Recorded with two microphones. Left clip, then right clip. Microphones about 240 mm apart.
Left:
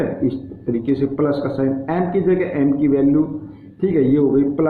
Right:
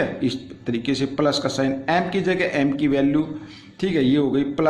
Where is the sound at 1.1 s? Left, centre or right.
Right.